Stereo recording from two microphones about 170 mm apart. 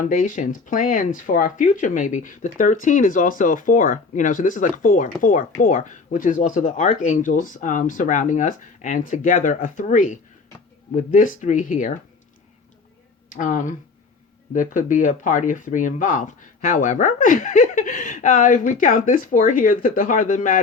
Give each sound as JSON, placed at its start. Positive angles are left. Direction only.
{"t": 0.0, "sound": "speech", "side_deg": 50}
{"t": 13.3, "sound": "speech", "side_deg": 50}